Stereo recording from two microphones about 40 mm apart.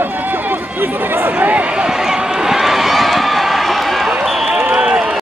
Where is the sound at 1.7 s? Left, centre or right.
Centre.